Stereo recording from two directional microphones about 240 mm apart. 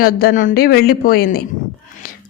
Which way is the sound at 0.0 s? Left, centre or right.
Left.